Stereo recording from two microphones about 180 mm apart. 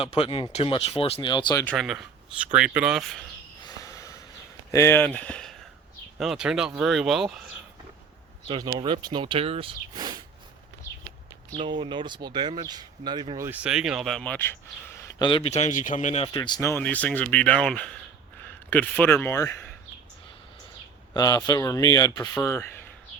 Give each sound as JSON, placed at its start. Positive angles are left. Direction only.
{"t": 0.0, "sound": "speech", "side_deg": 30}
{"t": 1.6, "sound": "speech", "side_deg": 0}
{"t": 3.6, "sound": "snort", "side_deg": 20}
{"t": 4.7, "sound": "speech", "side_deg": 15}
{"t": 8.4, "sound": "speech", "side_deg": -25}
{"t": 9.9, "sound": "a sound", "side_deg": -25}
{"t": 11.5, "sound": "speech", "side_deg": -30}
{"t": 14.8, "sound": "a sound", "side_deg": 15}
{"t": 15.3, "sound": "speech", "side_deg": 30}
{"t": 16.3, "sound": "speech", "side_deg": 25}
{"t": 21.1, "sound": "speech", "side_deg": 20}